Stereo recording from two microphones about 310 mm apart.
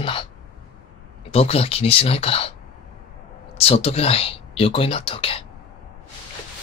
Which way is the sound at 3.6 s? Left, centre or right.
Centre.